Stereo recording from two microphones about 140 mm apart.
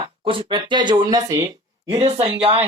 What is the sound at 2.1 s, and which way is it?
Speech, 40° right (ahead or behind).